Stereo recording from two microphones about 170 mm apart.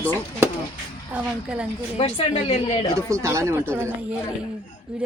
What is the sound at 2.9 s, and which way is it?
Speech, 20° right (ahead or behind).